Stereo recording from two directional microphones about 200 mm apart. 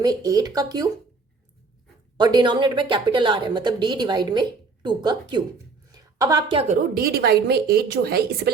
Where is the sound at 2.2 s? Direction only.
20° right (ahead or behind).